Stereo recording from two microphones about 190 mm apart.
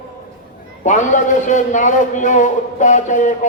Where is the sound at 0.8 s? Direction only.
40° left (ahead or behind).